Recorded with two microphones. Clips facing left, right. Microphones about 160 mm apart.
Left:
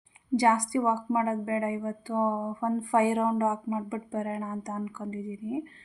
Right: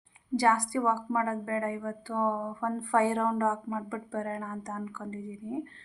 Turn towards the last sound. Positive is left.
turn(degrees=10)  # may be behind; listen again after turning